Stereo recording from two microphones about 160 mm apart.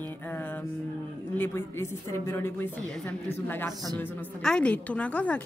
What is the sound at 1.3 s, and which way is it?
A woman's voice, 15° left (ahead or behind).